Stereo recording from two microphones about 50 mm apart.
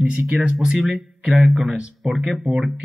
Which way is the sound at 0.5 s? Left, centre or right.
Centre.